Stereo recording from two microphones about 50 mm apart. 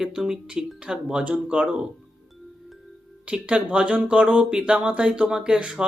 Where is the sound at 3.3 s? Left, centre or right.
Right.